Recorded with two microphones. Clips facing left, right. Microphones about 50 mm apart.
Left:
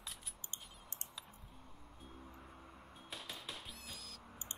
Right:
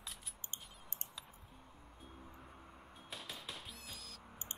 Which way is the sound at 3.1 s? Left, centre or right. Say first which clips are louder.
Even; centre.